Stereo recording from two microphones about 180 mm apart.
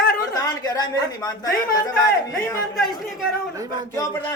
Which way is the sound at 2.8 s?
Centre (ahead or behind).